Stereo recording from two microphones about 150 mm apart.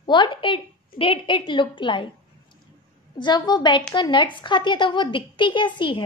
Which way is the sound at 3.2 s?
30° left (ahead or behind).